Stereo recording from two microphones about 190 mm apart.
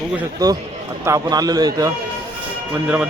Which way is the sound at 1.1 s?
20° right (ahead or behind).